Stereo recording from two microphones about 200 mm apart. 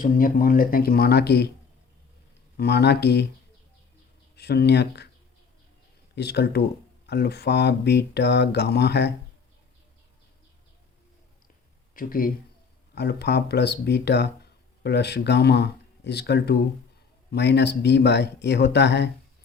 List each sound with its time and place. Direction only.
0.0 s speech: 45° left (ahead or behind)
2.6 s speech: 55° left (ahead or behind)
4.4 s speech: 55° left (ahead or behind)
6.1 s speech: 55° left (ahead or behind)
11.9 s speech: 45° left (ahead or behind)